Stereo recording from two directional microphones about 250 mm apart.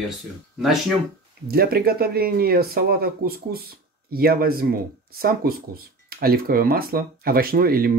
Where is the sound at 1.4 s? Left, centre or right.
Right.